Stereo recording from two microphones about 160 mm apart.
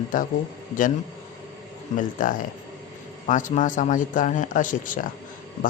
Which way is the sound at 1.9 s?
55° left (ahead or behind).